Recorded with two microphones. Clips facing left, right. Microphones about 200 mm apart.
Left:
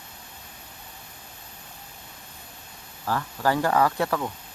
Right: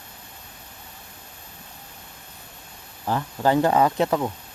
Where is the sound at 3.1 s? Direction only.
20° right (ahead or behind).